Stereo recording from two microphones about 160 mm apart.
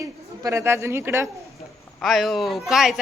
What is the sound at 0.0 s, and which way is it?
A woman's voice, 20° right (ahead or behind).